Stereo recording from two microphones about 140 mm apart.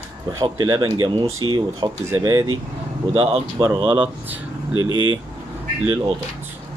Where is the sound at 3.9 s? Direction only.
10° right (ahead or behind).